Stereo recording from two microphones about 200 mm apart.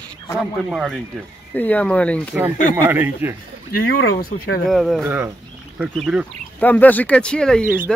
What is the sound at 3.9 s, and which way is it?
Speech, 50° left (ahead or behind).